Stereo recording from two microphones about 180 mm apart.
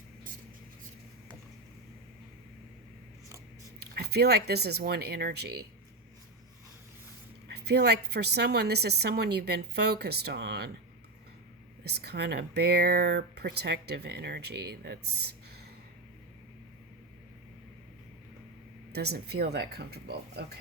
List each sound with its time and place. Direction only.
3.8 s speech: 60° right (ahead or behind)
7.4 s speech: 65° right (ahead or behind)
11.8 s speech: 65° right (ahead or behind)
18.9 s speech: 65° right (ahead or behind)